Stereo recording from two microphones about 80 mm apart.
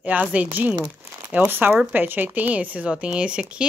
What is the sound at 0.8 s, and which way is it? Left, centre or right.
Crumpling, centre.